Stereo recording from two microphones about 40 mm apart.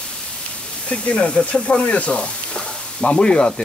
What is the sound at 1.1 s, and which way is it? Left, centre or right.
Speech, left.